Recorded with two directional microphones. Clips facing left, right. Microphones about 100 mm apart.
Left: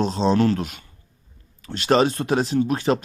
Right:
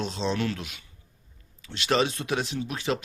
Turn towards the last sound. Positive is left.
turn(degrees=40)  # may be behind; listen again after turning